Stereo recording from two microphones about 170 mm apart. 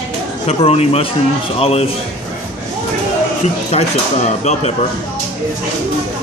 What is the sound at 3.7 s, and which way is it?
Speech, 40° left (ahead or behind).